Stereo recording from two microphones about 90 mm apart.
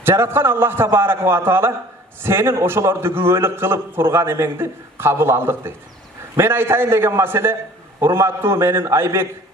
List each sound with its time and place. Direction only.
0.0 s a man's voice: 30° right (ahead or behind)